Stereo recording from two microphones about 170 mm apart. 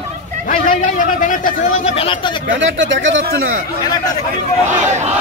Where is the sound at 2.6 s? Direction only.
90° right.